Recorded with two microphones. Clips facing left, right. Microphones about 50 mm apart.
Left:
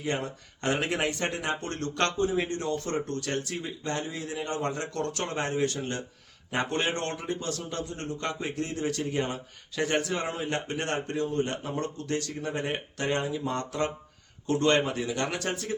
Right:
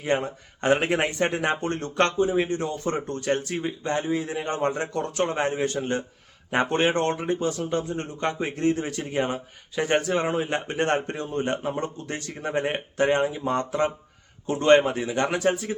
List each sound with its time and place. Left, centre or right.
0.0 s a man's voice: right
4.9 s a man's voice: centre